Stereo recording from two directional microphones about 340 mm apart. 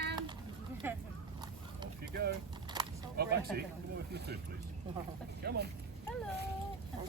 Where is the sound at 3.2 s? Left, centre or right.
Right.